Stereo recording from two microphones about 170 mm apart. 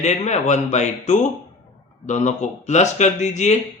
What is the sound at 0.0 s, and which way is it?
Speech, 45° left (ahead or behind).